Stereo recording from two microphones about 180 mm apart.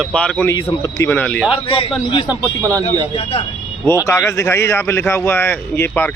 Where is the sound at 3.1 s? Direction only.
30° left (ahead or behind).